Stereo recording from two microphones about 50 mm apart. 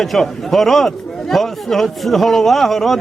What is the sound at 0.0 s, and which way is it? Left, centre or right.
A man's voice, centre.